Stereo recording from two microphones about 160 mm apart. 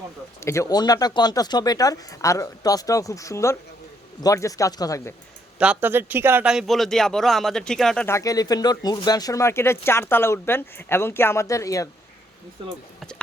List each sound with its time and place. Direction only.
0.3 s speech: 15° left (ahead or behind)
5.5 s a man's voice: 10° right (ahead or behind)
8.0 s speech: 20° left (ahead or behind)
13.0 s speech: 5° left (ahead or behind)